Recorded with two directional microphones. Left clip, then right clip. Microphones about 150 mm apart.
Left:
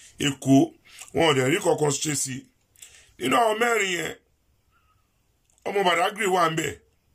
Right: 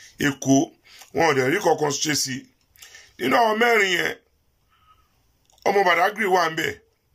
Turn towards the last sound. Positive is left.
turn(degrees=25)  # may be behind; listen again after turning